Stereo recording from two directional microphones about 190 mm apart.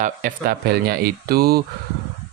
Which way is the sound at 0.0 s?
45° right (ahead or behind).